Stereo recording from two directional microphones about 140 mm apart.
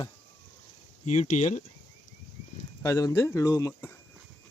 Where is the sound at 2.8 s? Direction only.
25° left (ahead or behind).